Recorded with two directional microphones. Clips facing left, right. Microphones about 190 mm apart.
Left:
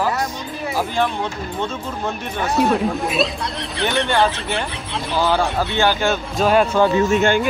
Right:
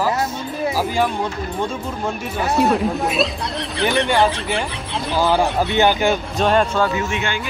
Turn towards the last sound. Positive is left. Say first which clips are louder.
# left 8 dB
turn(degrees=45)  # may be behind; listen again after turning